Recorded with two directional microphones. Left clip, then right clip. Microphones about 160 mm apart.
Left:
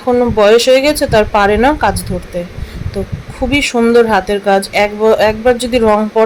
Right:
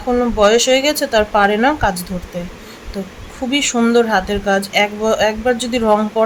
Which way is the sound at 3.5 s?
20° left (ahead or behind).